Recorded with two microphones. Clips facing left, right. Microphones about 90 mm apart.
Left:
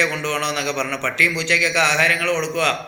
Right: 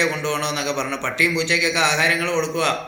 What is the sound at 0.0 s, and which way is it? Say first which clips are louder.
A man's voice: even; 20° right (ahead or behind).